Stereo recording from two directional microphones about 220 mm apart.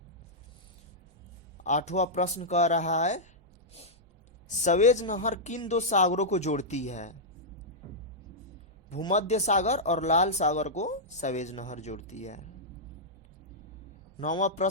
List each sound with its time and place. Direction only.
1.5 s speech: 30° left (ahead or behind)
3.7 s a sound: 30° left (ahead or behind)
4.4 s speech: 35° left (ahead or behind)
8.9 s speech: 30° left (ahead or behind)
14.6 s speech: 35° left (ahead or behind)